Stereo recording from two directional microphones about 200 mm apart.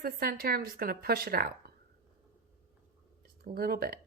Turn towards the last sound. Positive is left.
turn(degrees=-50)  # may be behind; listen again after turning